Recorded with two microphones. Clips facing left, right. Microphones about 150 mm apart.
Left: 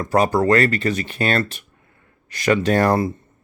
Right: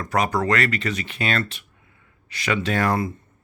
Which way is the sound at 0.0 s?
30° left (ahead or behind).